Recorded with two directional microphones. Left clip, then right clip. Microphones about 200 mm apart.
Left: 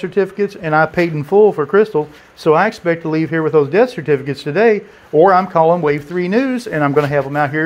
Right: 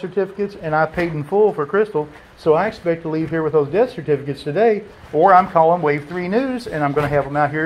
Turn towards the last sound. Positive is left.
turn(degrees=65)  # may be behind; listen again after turning